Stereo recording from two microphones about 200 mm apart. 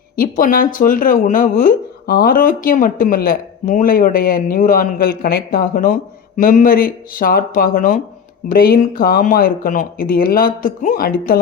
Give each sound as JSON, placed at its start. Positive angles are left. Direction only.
{"t": 0.2, "sound": "speech", "side_deg": 45}